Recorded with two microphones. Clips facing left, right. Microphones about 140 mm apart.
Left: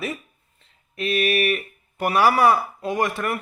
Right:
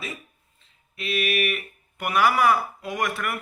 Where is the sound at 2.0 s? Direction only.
35° left (ahead or behind).